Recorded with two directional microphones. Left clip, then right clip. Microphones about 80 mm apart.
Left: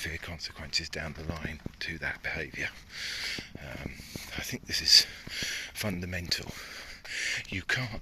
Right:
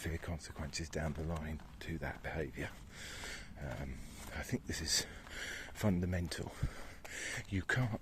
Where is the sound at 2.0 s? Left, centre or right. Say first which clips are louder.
Left 7 dB; right.